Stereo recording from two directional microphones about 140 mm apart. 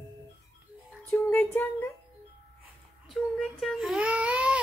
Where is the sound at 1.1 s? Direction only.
15° left (ahead or behind).